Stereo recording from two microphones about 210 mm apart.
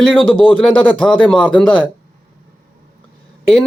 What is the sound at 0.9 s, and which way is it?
Speech, 5° left (ahead or behind).